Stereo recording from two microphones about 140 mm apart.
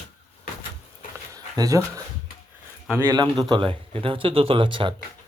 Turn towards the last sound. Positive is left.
turn(degrees=-35)  # may be behind; listen again after turning